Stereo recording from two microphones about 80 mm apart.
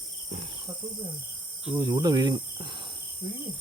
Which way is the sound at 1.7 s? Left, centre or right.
Right.